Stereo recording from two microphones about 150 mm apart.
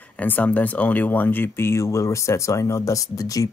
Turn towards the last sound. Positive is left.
turn(degrees=25)  # may be behind; listen again after turning